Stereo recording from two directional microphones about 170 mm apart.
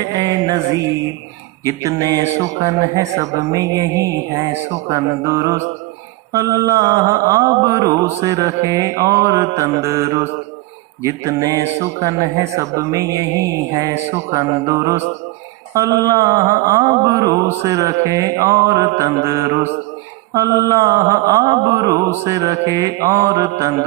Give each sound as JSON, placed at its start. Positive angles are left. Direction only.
{"t": 0.0, "sound": "music", "side_deg": -20}
{"t": 1.6, "sound": "mantra", "side_deg": -20}